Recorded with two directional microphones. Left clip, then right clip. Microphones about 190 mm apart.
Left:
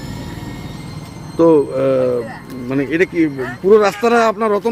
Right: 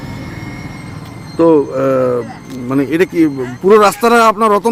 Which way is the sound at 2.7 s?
25° right (ahead or behind).